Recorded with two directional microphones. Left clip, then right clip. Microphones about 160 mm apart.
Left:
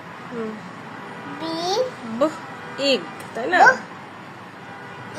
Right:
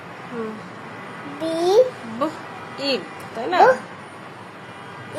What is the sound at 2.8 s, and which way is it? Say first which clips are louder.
Speech: left 3 dB; 15° left (ahead or behind).